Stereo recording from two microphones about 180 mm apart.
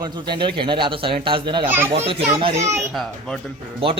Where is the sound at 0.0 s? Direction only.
25° right (ahead or behind).